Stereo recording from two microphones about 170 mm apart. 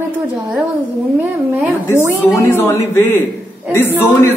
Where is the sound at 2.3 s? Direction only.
15° left (ahead or behind).